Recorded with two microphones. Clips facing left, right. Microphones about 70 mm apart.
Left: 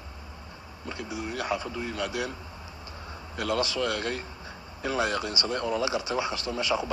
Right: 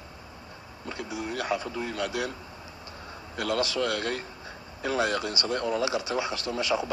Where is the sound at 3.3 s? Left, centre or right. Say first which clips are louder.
Even; right.